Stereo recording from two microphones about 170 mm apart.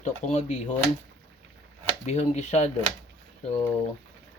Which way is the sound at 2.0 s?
40° left (ahead or behind).